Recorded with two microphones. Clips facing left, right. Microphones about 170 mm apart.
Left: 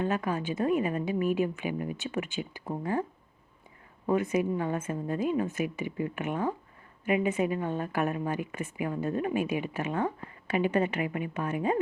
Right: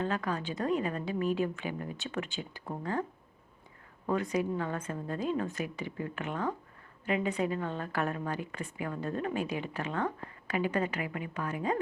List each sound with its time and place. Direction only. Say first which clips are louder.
0.0 s speech: left 3 dB; 20° left (ahead or behind)
4.0 s speech: left 4 dB; 20° left (ahead or behind)